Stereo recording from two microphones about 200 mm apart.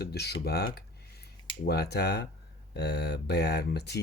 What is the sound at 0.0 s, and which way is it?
Speech, 55° left (ahead or behind).